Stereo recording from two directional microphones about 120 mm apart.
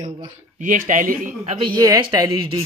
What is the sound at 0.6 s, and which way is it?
Speech, 90° right.